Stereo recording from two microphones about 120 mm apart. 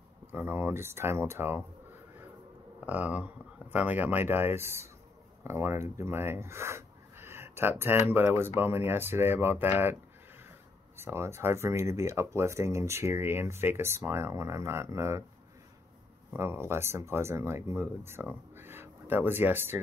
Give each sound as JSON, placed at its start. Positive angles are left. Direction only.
{"t": 0.3, "sound": "speech", "side_deg": -20}
{"t": 2.8, "sound": "speech", "side_deg": -15}
{"t": 11.0, "sound": "speech", "side_deg": -20}
{"t": 16.3, "sound": "speech", "side_deg": -20}